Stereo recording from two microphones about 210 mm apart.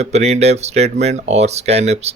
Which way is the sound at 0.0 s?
30° right (ahead or behind).